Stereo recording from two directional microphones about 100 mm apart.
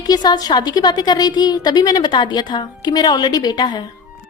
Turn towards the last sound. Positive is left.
turn(degrees=45)  # may be behind; listen again after turning